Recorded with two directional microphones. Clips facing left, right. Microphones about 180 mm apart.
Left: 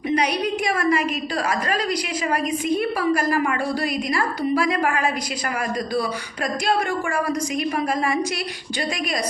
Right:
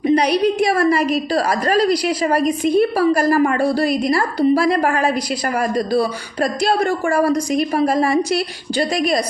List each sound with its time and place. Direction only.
0.1 s a woman's voice: 35° right (ahead or behind)